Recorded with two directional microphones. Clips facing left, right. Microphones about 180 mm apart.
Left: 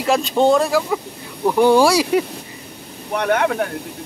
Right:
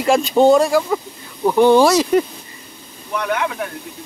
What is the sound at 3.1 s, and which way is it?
Speech, 55° left (ahead or behind).